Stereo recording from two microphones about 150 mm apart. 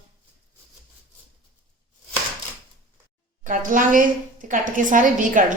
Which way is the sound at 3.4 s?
65° right (ahead or behind).